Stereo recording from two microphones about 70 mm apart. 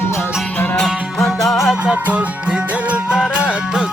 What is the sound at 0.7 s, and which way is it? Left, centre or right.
Music, centre.